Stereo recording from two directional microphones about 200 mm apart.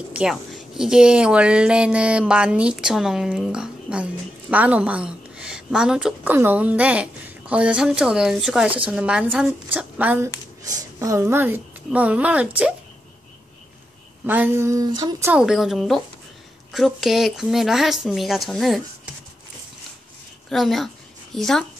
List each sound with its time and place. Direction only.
0.1 s a woman's voice: 5° right (ahead or behind)
14.2 s a woman's voice: 10° right (ahead or behind)
20.4 s a woman's voice: centre (ahead or behind)